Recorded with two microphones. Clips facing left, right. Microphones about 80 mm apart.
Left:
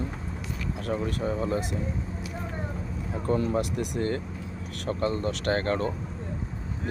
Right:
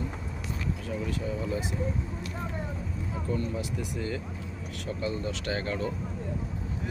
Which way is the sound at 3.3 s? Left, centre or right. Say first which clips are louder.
Left 7 dB; left.